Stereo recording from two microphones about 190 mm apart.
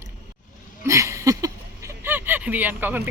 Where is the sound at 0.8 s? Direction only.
15° right (ahead or behind).